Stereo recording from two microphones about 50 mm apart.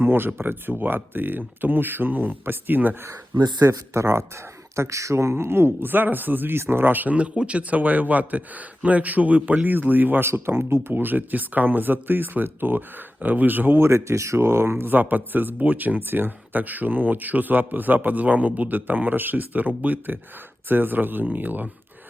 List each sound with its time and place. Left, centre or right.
0.0 s speech: right
3.7 s speech: right
4.8 s speech: right
6.6 s speech: right
7.2 s speech: right
10.2 s speech: right
13.7 s speech: right